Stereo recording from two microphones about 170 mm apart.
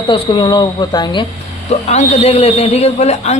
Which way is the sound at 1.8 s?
40° left (ahead or behind).